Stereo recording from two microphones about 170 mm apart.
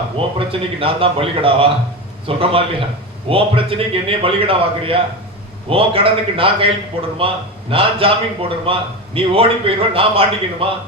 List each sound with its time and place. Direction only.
0.3 s a man's voice: 30° right (ahead or behind)